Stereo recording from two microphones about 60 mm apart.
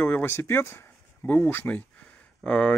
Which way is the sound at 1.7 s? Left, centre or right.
Left.